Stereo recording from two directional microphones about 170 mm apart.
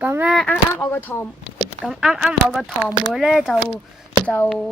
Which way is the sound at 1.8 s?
5° right (ahead or behind).